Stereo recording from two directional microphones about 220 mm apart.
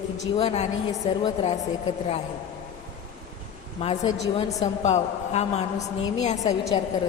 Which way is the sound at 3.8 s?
30° left (ahead or behind).